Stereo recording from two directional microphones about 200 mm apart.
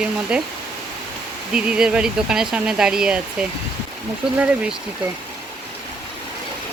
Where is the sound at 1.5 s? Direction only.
5° right (ahead or behind).